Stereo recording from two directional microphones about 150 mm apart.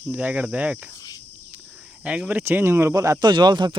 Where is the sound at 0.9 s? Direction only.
25° left (ahead or behind).